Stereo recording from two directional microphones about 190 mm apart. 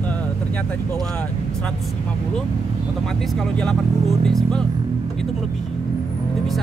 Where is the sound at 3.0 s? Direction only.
Centre (ahead or behind).